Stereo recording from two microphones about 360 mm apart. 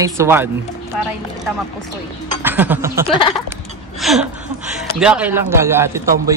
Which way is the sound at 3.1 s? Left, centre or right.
Centre.